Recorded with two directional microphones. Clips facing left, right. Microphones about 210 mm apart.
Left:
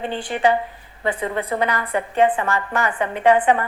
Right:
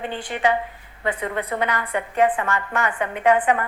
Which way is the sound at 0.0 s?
30° left (ahead or behind).